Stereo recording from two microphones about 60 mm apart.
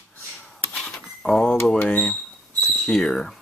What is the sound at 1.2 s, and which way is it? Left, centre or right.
Speech, centre.